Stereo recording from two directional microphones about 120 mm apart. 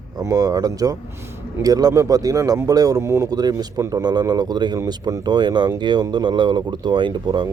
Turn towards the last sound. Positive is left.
turn(degrees=-40)  # may be behind; listen again after turning